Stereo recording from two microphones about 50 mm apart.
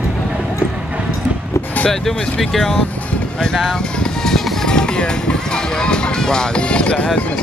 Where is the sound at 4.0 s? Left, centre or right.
Centre.